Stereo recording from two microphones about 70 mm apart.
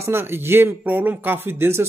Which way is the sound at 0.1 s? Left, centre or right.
Right.